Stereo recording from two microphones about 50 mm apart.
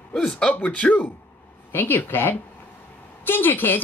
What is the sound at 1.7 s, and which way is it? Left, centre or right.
A woman's voice, left.